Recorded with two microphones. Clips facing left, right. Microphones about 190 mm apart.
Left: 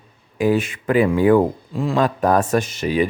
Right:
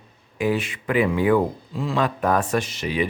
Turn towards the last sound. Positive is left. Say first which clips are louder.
# left 5 dB
turn(degrees=45)  # may be behind; listen again after turning